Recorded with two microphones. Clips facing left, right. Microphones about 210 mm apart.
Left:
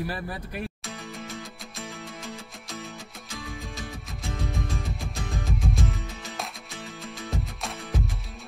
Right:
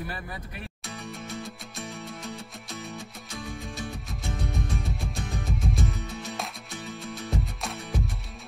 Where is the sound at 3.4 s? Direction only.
Centre (ahead or behind).